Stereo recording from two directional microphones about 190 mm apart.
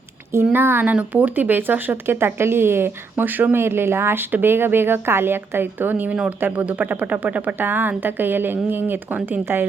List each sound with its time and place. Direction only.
0.4 s speech: 10° right (ahead or behind)